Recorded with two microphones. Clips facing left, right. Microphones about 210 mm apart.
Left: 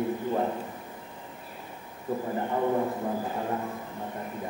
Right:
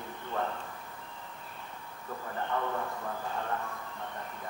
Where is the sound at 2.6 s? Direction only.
25° left (ahead or behind).